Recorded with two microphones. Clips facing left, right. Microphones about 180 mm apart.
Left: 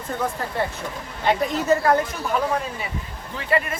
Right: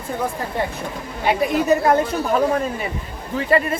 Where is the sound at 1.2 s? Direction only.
10° right (ahead or behind).